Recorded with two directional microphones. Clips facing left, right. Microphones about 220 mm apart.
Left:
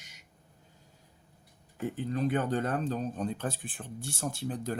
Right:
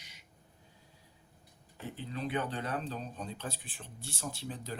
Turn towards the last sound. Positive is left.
turn(degrees=50)  # may be behind; listen again after turning